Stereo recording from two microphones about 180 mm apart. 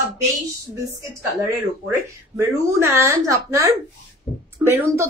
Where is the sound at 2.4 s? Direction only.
15° right (ahead or behind).